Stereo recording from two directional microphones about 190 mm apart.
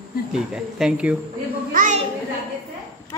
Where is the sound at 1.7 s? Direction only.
45° right (ahead or behind).